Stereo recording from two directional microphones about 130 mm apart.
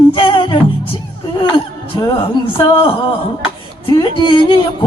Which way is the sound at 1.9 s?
35° left (ahead or behind).